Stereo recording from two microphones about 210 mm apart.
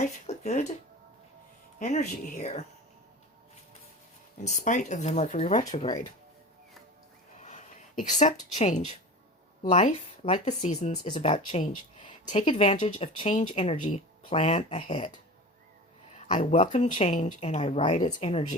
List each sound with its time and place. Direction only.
0.0 s a sound: 35° left (ahead or behind)
1.8 s speech: 35° left (ahead or behind)
4.4 s speech: 35° left (ahead or behind)
7.3 s speech: 35° left (ahead or behind)
16.1 s a woman's voice: 30° left (ahead or behind)